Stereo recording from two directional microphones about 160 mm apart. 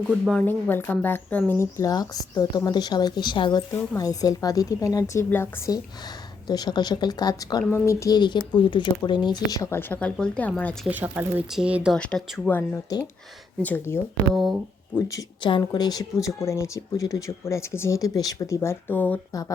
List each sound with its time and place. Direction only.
0.3 s speech: 10° left (ahead or behind)
10.8 s speech: 10° right (ahead or behind)
11.9 s speech: 5° left (ahead or behind)
12.5 s speech: 20° left (ahead or behind)
14.3 s speech: centre (ahead or behind)
15.0 s speech: 25° left (ahead or behind)